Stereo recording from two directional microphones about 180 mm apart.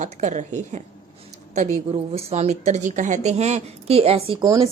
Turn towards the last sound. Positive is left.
turn(degrees=-25)  # may be behind; listen again after turning